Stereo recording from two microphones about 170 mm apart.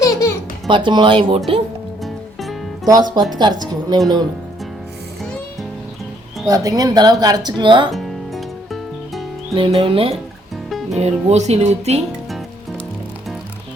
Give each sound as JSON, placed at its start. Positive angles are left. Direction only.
{"t": 0.0, "sound": "music", "side_deg": 20}
{"t": 0.7, "sound": "speech", "side_deg": -30}
{"t": 2.0, "sound": "music", "side_deg": 0}
{"t": 2.8, "sound": "speech", "side_deg": -25}
{"t": 6.5, "sound": "speech", "side_deg": -20}
{"t": 7.9, "sound": "music", "side_deg": 0}
{"t": 9.6, "sound": "speech", "side_deg": -30}